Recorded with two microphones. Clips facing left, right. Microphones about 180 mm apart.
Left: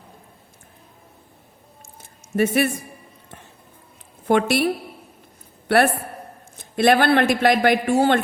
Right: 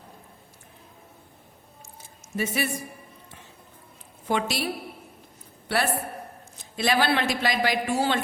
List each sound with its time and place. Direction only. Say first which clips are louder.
2.0 s squish: left 9 dB; 60° left (ahead or behind)
4.3 s a man's voice: left 8 dB; 55° left (ahead or behind)